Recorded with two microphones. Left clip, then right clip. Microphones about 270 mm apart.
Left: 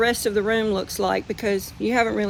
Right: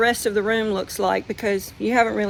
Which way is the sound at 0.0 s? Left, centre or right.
Centre.